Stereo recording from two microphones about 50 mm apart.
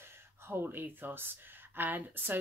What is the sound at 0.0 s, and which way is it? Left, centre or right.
Speech, right.